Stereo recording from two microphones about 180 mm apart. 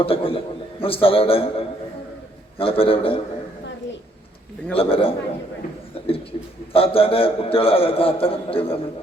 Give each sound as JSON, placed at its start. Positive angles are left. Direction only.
{"t": 0.0, "sound": "a man's voice", "side_deg": 30}
{"t": 4.7, "sound": "a man's voice", "side_deg": 30}
{"t": 6.3, "sound": "a man's voice", "side_deg": 30}